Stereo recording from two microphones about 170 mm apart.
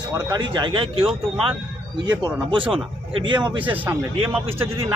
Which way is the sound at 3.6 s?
10° right (ahead or behind).